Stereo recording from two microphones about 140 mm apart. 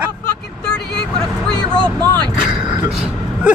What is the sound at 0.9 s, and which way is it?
Vehicle, 5° left (ahead or behind).